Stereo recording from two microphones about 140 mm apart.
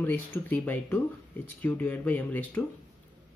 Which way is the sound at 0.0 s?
15° left (ahead or behind).